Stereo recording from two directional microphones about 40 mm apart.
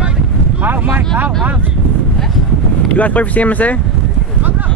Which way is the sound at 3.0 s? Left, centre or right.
Left.